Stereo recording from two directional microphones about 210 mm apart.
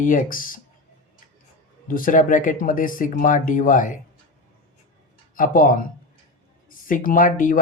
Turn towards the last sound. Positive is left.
turn(degrees=40)  # may be behind; listen again after turning